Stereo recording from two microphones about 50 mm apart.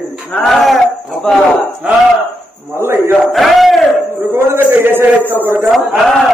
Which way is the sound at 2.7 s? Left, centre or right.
Right.